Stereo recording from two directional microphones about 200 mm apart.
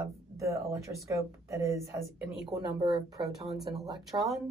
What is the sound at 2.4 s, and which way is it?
Speech, 25° right (ahead or behind).